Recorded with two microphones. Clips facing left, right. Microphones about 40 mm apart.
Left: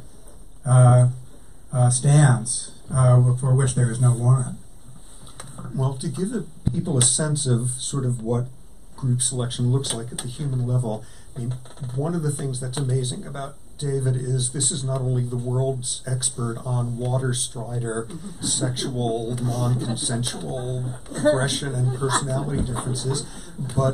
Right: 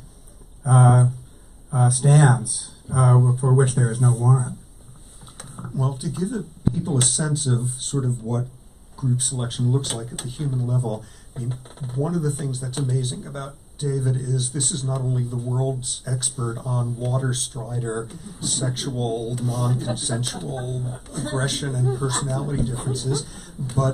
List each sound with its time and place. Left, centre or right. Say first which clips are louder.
0.7 s a sound: right 1 dB; centre
1.7 s speech: right 2 dB; centre
5.4 s speech: right 1 dB; centre
21.1 s speech: left 10 dB; centre
21.4 s speech: even; centre